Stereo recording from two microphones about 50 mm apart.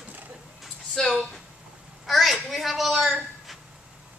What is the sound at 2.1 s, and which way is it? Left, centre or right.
Speech, centre.